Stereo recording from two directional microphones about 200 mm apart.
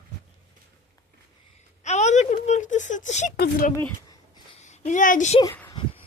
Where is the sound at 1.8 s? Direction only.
35° left (ahead or behind).